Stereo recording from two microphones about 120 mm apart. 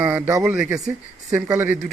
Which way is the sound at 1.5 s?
20° right (ahead or behind).